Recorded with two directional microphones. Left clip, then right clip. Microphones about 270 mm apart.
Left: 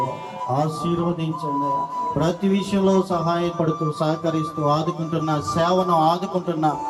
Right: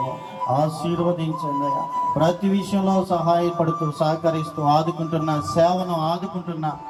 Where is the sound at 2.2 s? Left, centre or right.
Centre.